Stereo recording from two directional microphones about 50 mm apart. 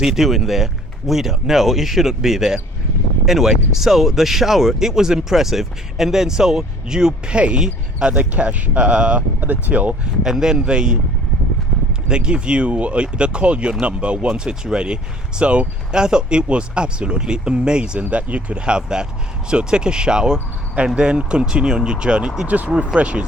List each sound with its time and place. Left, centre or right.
0.0 s speech: centre; by 9.2 s right
9.4 s speech: right
10.2 s speech: centre
12.0 s speech: centre
22.4 s speech: right